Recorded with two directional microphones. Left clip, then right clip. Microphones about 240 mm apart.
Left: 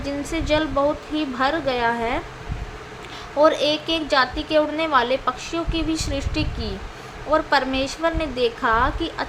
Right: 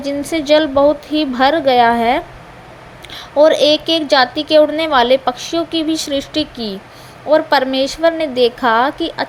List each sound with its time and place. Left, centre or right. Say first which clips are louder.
0.0 s a woman's voice: right 8 dB; right